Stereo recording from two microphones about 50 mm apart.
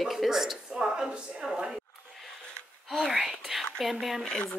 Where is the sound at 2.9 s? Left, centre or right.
Centre.